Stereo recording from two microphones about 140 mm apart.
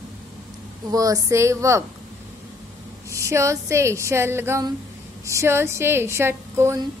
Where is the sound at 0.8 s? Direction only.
25° right (ahead or behind).